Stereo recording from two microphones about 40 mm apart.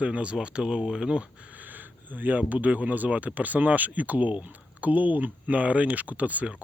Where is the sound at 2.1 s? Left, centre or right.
Right.